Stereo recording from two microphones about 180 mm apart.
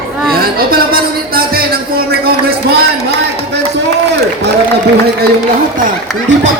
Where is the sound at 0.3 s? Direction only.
55° right (ahead or behind).